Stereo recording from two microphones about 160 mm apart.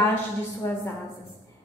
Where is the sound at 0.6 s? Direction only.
15° left (ahead or behind).